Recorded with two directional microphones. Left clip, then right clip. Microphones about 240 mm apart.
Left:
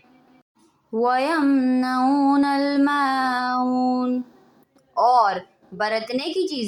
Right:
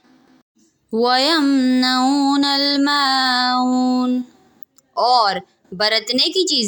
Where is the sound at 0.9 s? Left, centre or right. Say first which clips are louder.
Right 4 dB; right.